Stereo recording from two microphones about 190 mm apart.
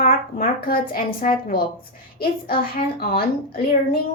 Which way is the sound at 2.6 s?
50° left (ahead or behind).